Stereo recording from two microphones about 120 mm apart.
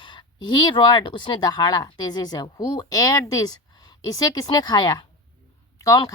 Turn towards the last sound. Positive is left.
turn(degrees=30)  # may be behind; listen again after turning